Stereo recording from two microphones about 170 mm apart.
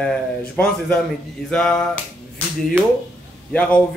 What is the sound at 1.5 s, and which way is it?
Speech, 5° left (ahead or behind).